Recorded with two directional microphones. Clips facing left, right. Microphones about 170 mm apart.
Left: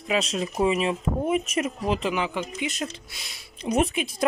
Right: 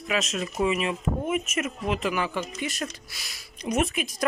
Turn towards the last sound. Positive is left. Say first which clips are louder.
# left 2 dB
turn(degrees=30)  # may be behind; listen again after turning